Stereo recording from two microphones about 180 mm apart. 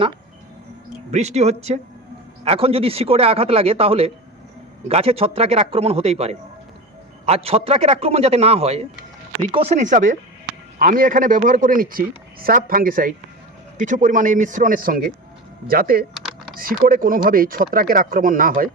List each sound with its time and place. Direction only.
1.1 s a man's voice: 40° right (ahead or behind)